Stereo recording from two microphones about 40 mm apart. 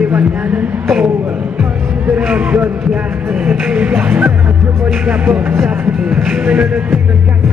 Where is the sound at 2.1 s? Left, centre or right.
Right.